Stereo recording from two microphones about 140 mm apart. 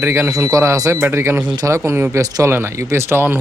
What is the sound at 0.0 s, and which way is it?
Speech, 15° right (ahead or behind).